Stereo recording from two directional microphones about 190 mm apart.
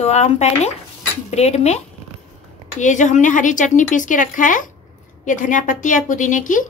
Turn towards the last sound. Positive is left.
turn(degrees=40)  # may be behind; listen again after turning